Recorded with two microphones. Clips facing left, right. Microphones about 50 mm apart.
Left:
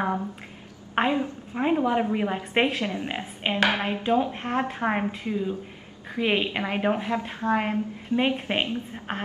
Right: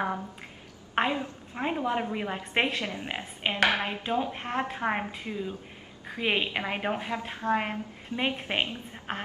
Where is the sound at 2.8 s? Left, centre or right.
Left.